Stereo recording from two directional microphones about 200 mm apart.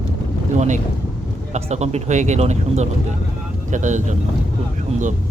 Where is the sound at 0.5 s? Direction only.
35° right (ahead or behind).